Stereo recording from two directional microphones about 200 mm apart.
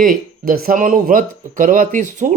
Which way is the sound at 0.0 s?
45° right (ahead or behind).